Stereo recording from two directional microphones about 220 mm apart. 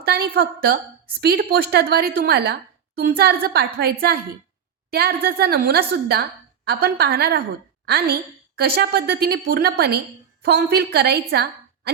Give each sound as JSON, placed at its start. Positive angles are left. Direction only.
{"t": 0.0, "sound": "a woman's voice", "side_deg": -45}